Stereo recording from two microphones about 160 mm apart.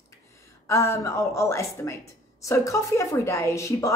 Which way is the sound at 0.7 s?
20° left (ahead or behind).